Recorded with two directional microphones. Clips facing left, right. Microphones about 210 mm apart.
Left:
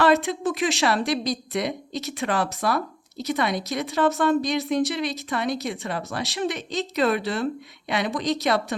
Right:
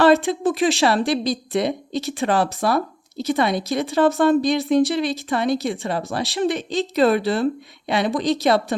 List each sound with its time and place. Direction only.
0.0 s a woman's voice: 30° right (ahead or behind)